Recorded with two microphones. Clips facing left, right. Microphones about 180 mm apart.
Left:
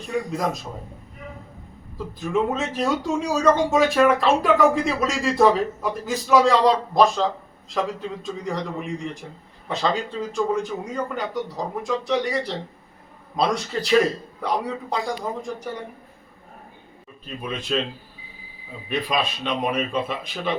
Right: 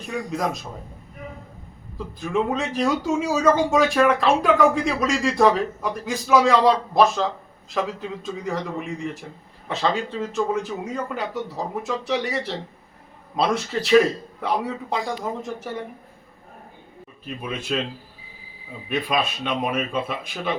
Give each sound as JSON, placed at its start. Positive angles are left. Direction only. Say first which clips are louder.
{"t": 0.3, "sound": "speech", "louder": "even", "side_deg": 0}
{"t": 2.2, "sound": "speech", "louder": "even", "side_deg": 0}
{"t": 9.6, "sound": "speech", "louder": "even", "side_deg": 0}
{"t": 17.4, "sound": "a man's voice", "louder": "even", "side_deg": -10}
{"t": 18.9, "sound": "speech", "louder": "right 1 dB", "side_deg": -5}